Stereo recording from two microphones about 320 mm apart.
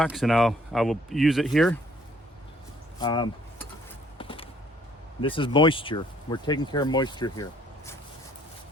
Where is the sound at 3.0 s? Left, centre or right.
Centre.